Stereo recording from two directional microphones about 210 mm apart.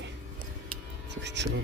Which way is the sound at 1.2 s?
55° right (ahead or behind).